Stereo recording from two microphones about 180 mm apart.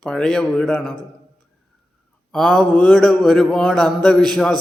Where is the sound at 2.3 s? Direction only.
5° left (ahead or behind).